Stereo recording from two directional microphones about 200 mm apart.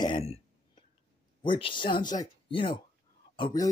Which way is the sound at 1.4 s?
25° left (ahead or behind).